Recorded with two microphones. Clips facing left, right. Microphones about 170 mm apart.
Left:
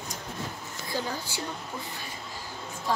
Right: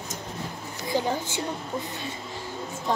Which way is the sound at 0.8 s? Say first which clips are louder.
Right 7 dB; 15° right (ahead or behind).